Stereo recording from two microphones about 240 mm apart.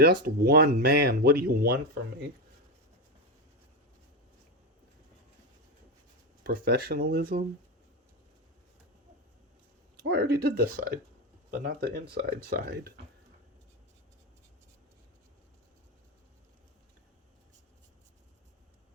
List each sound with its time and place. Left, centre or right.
0.0 s speech: right
6.4 s speech: right
10.0 s speech: right